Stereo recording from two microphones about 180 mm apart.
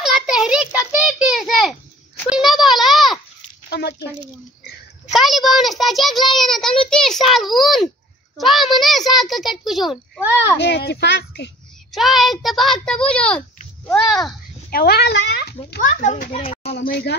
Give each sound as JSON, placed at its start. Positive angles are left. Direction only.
{"t": 0.0, "sound": "a sound", "side_deg": -5}
{"t": 3.7, "sound": "speech", "side_deg": 75}
{"t": 5.1, "sound": "a child's voice", "side_deg": 0}
{"t": 10.2, "sound": "a child's voice", "side_deg": -10}
{"t": 10.6, "sound": "a woman's voice", "side_deg": 70}
{"t": 11.9, "sound": "a child's voice", "side_deg": 0}
{"t": 14.7, "sound": "a child's voice", "side_deg": 60}
{"t": 16.0, "sound": "a child's voice", "side_deg": 45}
{"t": 16.7, "sound": "speech", "side_deg": 60}